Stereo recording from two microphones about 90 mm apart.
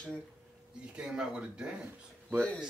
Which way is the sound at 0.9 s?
10° right (ahead or behind).